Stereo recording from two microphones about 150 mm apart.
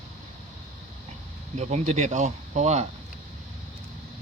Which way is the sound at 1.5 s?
50° right (ahead or behind).